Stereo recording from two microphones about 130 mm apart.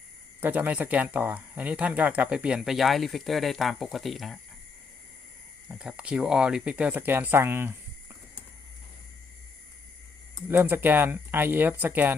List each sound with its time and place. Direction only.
0.4 s speech: 15° right (ahead or behind)
5.6 s speech: 5° right (ahead or behind)
10.5 s speech: 15° right (ahead or behind)